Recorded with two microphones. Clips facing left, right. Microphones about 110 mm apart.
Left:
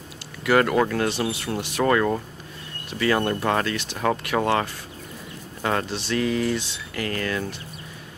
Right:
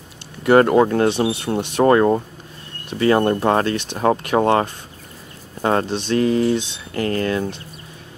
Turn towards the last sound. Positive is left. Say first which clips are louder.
# right 6 dB
turn(degrees=-30)  # may be behind; listen again after turning